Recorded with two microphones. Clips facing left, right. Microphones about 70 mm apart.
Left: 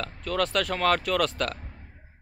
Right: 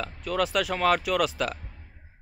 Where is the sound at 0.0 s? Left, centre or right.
Centre.